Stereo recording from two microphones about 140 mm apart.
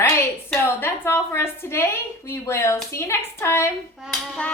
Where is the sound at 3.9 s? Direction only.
5° right (ahead or behind).